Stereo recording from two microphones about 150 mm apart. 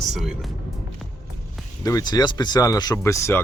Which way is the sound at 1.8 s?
25° left (ahead or behind).